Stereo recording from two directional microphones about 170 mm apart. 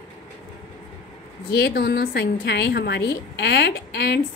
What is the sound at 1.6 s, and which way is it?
A woman's voice, 70° left (ahead or behind).